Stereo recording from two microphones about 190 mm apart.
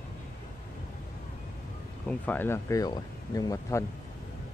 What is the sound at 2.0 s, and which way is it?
Speech, 10° left (ahead or behind).